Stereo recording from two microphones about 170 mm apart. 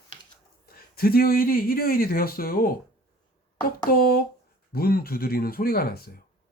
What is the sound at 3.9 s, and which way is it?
Speech, 60° left (ahead or behind).